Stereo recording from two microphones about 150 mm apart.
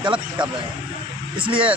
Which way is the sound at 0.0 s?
30° right (ahead or behind).